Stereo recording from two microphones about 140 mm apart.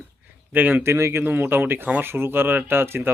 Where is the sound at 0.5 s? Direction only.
15° right (ahead or behind).